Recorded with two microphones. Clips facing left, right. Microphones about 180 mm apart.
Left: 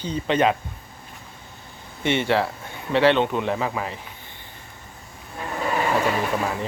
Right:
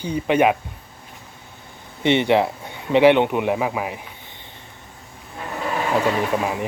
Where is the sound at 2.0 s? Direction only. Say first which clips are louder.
Right 4 dB; 20° right (ahead or behind).